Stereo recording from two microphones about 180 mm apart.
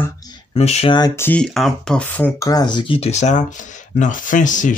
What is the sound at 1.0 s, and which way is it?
Speech, 10° left (ahead or behind).